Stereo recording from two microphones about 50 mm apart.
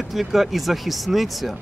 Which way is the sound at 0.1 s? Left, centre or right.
Centre.